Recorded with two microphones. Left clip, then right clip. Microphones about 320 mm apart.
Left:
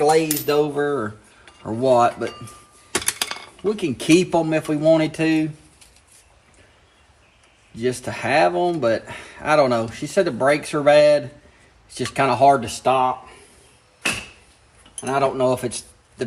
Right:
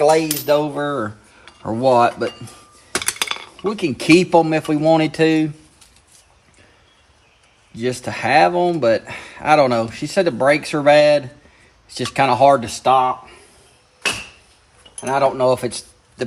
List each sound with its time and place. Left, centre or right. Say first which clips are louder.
0.0 s speech: right 2 dB; right
3.7 s speech: right 3 dB; right
7.8 s speech: right 2 dB; right
15.0 s speech: right 3 dB; right